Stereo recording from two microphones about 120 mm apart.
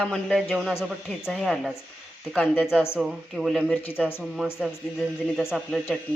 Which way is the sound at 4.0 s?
20° left (ahead or behind).